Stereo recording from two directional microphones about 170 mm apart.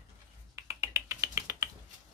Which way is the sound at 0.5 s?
15° right (ahead or behind).